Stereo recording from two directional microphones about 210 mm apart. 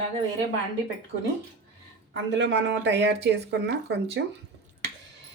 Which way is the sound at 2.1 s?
55° right (ahead or behind).